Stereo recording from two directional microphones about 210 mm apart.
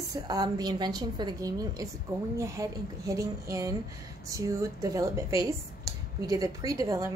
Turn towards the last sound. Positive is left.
turn(degrees=-15)  # may be behind; listen again after turning